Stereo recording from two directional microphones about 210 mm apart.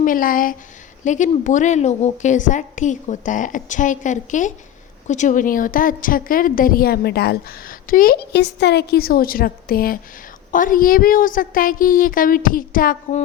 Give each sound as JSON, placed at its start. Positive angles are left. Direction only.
{"t": 0.0, "sound": "a woman's voice", "side_deg": 40}